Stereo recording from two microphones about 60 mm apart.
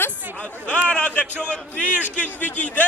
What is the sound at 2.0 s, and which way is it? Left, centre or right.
Speech, left.